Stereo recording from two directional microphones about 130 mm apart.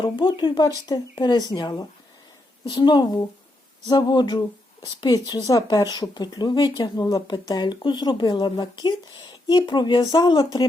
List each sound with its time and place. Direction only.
0.0 s speech: 35° left (ahead or behind)